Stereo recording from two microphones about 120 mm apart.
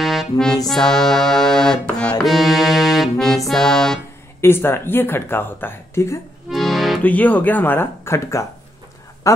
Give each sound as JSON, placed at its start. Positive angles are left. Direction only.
{"t": 0.0, "sound": "music", "side_deg": 0}
{"t": 2.2, "sound": "accordion", "side_deg": 0}
{"t": 4.4, "sound": "speech", "side_deg": 20}
{"t": 6.5, "sound": "accordion", "side_deg": 0}
{"t": 7.0, "sound": "speech", "side_deg": 15}